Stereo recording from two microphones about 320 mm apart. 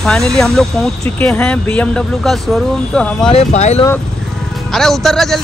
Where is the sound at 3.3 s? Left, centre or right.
Left.